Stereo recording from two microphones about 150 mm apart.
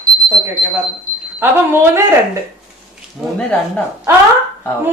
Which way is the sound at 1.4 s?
15° right (ahead or behind).